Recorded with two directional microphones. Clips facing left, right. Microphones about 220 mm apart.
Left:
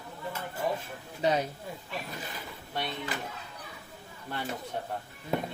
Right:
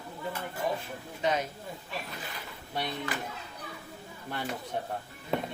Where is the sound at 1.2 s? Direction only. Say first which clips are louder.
Left 2 dB; 35° left (ahead or behind).